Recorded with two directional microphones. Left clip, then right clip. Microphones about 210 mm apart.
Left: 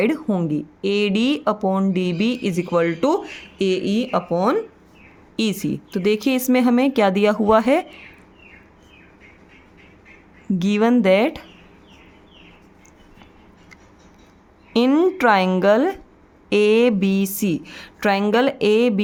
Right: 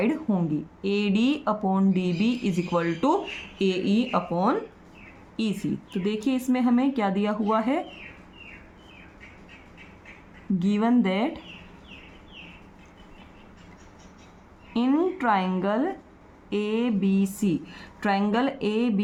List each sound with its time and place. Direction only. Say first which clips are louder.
0.0 s speech: left 6 dB; 40° left (ahead or behind)
10.6 s speech: left 7 dB; 50° left (ahead or behind)
14.7 s speech: left 8 dB; 50° left (ahead or behind)